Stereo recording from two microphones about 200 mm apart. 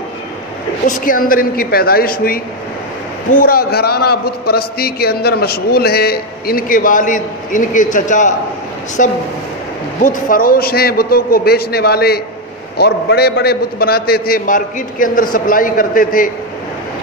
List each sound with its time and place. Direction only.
0.8 s a man's voice: 45° left (ahead or behind)